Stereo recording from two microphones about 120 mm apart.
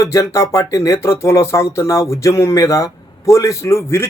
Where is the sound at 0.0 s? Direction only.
25° left (ahead or behind).